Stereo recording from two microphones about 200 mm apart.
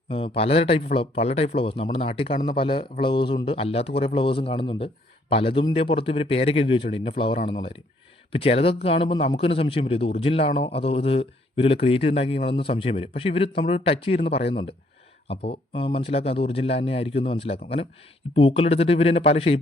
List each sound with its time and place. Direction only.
0.1 s a man's voice: 30° left (ahead or behind)
16.0 s a man's voice: 30° left (ahead or behind)